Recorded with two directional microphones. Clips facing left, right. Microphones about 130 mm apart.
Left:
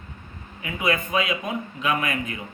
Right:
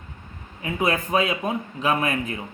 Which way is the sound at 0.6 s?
35° right (ahead or behind).